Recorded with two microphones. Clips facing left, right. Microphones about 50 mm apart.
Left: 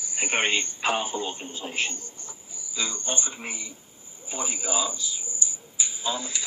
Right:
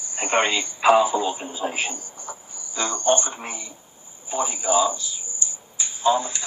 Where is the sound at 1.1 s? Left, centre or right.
Right.